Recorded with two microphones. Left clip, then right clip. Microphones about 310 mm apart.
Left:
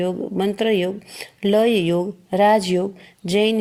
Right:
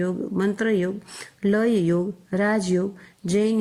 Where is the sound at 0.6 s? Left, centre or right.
Left.